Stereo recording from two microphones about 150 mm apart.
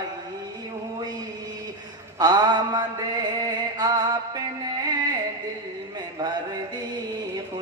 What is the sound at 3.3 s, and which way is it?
Music, 30° right (ahead or behind).